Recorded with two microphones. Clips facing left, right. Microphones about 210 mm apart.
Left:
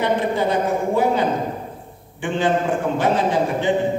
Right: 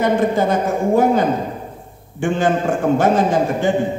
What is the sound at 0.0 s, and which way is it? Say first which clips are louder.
A man's voice: right 4 dB; 45° right (ahead or behind).